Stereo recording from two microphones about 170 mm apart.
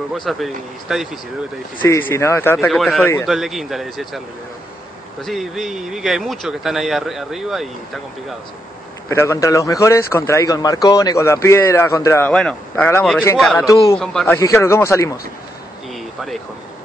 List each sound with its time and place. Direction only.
0.1 s speech: centre (ahead or behind)
1.8 s speech: 10° left (ahead or behind)
2.6 s speech: centre (ahead or behind)
5.2 s speech: centre (ahead or behind)
9.1 s speech: 15° left (ahead or behind)
12.3 s speech: 5° left (ahead or behind)
13.7 s a man's voice: 20° left (ahead or behind)
13.9 s speech: 5° left (ahead or behind)
14.2 s speech: 15° left (ahead or behind)
15.9 s a sound: centre (ahead or behind)